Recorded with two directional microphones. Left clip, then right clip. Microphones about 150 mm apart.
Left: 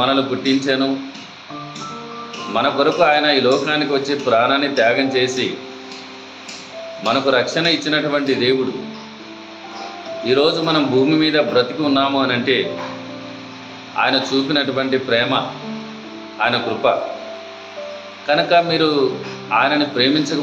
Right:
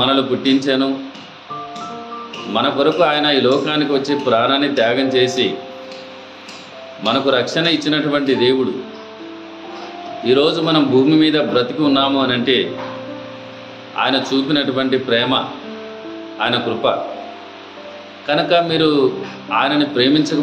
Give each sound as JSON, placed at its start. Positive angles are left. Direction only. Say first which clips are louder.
{"t": 0.0, "sound": "a man's voice", "louder": "right 1 dB", "side_deg": -90}
{"t": 2.5, "sound": "a man's voice", "louder": "right 1 dB", "side_deg": -90}
{"t": 7.0, "sound": "a man's voice", "louder": "even", "side_deg": -90}
{"t": 10.2, "sound": "a man's voice", "louder": "right 1 dB", "side_deg": -90}
{"t": 13.9, "sound": "a man's voice", "louder": "even", "side_deg": -90}
{"t": 16.3, "sound": "a man's voice", "louder": "even", "side_deg": -90}
{"t": 18.2, "sound": "a man's voice", "louder": "even", "side_deg": -90}